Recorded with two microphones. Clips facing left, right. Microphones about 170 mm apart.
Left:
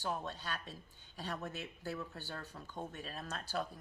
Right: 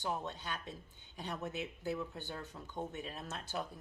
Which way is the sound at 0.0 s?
20° right (ahead or behind).